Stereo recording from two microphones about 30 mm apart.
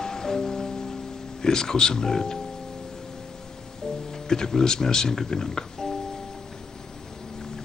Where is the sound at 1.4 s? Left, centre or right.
Left.